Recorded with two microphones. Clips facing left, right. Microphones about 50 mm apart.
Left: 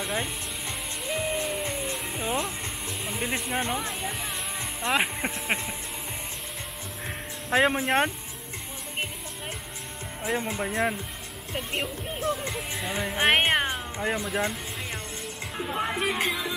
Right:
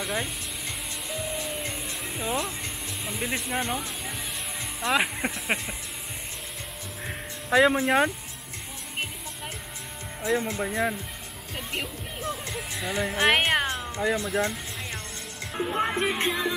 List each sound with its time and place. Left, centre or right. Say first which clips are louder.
0.0 s speech: even; centre
1.2 s music: left 4 dB; centre
2.0 s music: right 4 dB; centre
3.1 s speech: even; centre
4.8 s speech: right 1 dB; centre
7.5 s speech: right 3 dB; centre
10.2 s speech: right 2 dB; centre
14.2 s music: right 1 dB; centre
15.5 s speech: right 3 dB; centre